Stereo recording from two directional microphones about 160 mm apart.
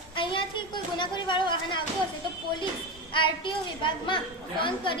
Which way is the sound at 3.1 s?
30° left (ahead or behind).